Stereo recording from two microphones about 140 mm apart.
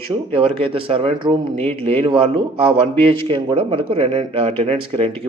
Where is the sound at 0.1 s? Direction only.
40° right (ahead or behind).